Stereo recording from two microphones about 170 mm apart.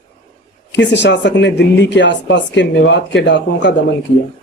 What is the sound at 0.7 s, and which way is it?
Speech, 90° left.